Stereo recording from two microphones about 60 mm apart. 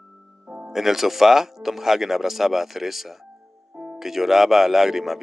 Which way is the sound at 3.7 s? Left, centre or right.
Right.